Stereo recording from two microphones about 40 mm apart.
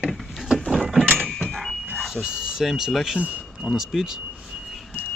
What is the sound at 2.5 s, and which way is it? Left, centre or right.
Speech, centre.